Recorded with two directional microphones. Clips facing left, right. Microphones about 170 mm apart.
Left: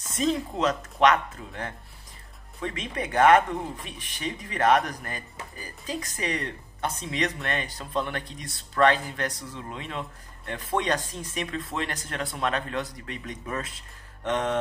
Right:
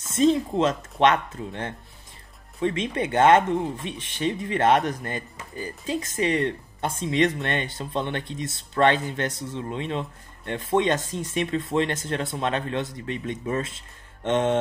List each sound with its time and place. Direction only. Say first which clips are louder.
0.1 s speech: right 6 dB; 25° right (ahead or behind)